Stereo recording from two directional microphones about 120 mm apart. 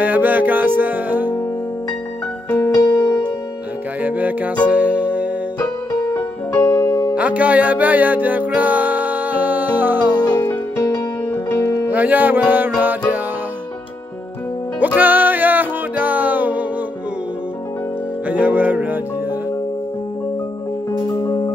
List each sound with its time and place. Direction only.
0.0 s music: 15° right (ahead or behind)
2.5 s music: 25° left (ahead or behind)
4.0 s music: 15° right (ahead or behind)
5.6 s music: 25° left (ahead or behind)
7.2 s music: 10° right (ahead or behind)
10.2 s music: 30° left (ahead or behind)
11.5 s music: 20° left (ahead or behind)
11.9 s music: 15° right (ahead or behind)
15.0 s music: 15° right (ahead or behind)
18.3 s music: 15° right (ahead or behind)
21.1 s music: 30° left (ahead or behind)